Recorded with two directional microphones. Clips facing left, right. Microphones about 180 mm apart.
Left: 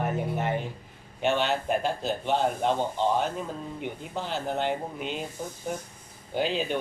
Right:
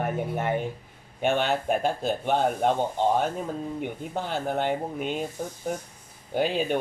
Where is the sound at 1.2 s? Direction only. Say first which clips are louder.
Right 1 dB; 50° right (ahead or behind).